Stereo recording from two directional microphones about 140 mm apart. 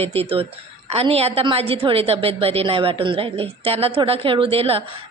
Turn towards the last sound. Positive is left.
turn(degrees=-45)  # may be behind; listen again after turning